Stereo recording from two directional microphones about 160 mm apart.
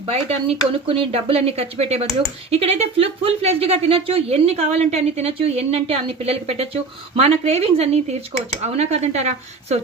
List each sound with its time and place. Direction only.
0.1 s speech: 40° right (ahead or behind)